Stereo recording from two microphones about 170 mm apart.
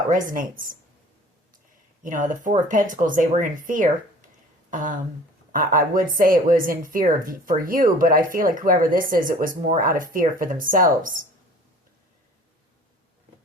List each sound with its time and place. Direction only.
0.1 s speech: 55° right (ahead or behind)
2.0 s speech: 50° right (ahead or behind)